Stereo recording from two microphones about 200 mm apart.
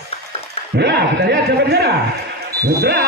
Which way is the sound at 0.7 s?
55° right (ahead or behind).